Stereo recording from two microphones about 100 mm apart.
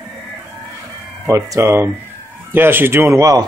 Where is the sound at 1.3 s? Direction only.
30° right (ahead or behind).